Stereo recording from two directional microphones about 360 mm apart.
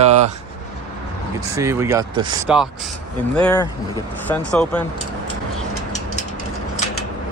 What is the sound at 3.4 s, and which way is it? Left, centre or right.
Speech, centre.